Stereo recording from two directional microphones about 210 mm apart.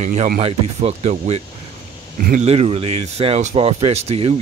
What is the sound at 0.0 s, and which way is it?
Speech, 35° right (ahead or behind).